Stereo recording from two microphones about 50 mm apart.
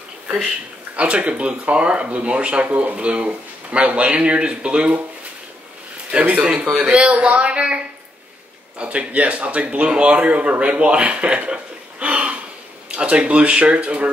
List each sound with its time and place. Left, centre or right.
0.9 s speech: right
6.1 s a man's voice: right